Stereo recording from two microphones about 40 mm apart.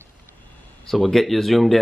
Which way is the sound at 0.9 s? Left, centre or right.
Centre.